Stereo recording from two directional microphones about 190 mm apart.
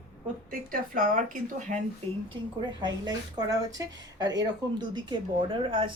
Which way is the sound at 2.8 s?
20° right (ahead or behind).